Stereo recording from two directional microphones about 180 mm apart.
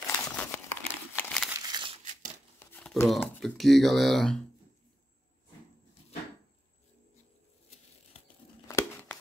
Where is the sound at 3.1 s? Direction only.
Centre (ahead or behind).